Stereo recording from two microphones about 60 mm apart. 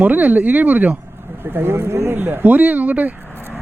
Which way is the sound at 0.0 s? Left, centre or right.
Right.